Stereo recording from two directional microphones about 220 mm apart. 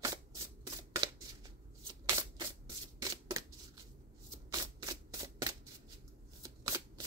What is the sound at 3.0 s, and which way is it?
Shuffling cards, 15° right (ahead or behind).